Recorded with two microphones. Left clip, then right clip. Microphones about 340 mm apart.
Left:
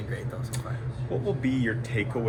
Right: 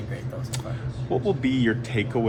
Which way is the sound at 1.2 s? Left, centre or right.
Right.